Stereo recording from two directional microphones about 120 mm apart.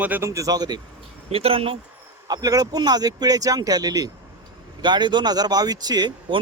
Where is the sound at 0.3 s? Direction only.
30° right (ahead or behind).